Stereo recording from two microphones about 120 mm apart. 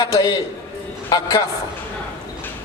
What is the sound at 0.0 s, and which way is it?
A man's voice, 40° left (ahead or behind).